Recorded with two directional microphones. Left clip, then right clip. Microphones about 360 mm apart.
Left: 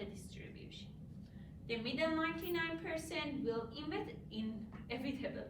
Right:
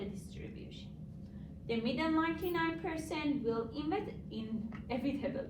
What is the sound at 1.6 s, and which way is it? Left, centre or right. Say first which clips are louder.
A woman's voice: right 3 dB; centre.